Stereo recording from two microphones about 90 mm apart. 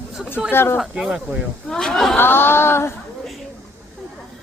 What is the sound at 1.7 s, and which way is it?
Speech, 5° left (ahead or behind).